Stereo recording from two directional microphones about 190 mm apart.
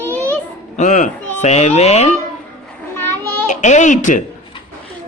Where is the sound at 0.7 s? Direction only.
40° left (ahead or behind).